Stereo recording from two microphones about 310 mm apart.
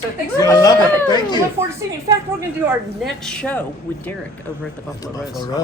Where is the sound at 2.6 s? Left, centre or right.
Centre.